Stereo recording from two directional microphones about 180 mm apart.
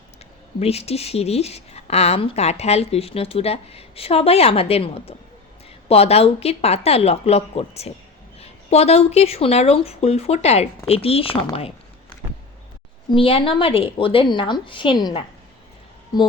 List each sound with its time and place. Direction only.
0.6 s a woman's voice: 35° left (ahead or behind)
13.1 s a woman's voice: 30° left (ahead or behind)